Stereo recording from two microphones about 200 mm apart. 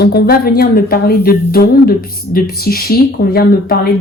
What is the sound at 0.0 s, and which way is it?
Speech, 55° left (ahead or behind).